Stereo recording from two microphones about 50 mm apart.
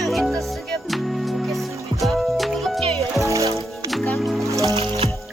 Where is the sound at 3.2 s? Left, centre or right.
Right.